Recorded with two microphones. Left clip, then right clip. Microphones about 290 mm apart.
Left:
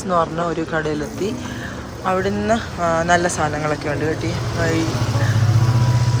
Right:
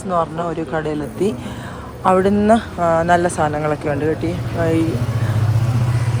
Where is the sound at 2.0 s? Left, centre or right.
Centre.